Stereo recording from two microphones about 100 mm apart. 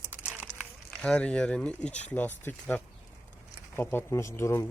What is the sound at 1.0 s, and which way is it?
Speech, 10° left (ahead or behind).